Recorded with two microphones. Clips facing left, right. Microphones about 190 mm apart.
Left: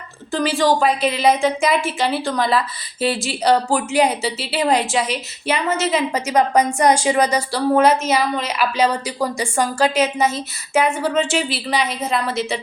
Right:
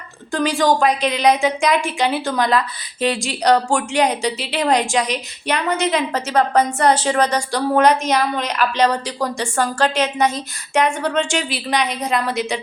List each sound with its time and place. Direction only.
0.3 s speech: centre (ahead or behind)